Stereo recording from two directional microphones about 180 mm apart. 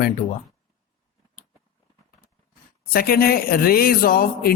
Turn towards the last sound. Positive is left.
turn(degrees=55)  # may be behind; listen again after turning